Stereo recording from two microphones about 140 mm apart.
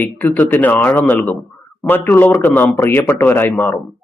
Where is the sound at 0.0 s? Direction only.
15° left (ahead or behind).